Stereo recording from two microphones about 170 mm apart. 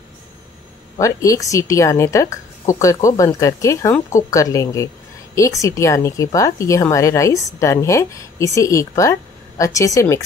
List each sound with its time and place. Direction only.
0.9 s a woman's voice: 20° left (ahead or behind)